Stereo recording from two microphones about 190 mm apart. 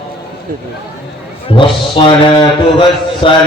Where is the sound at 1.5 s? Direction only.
25° left (ahead or behind).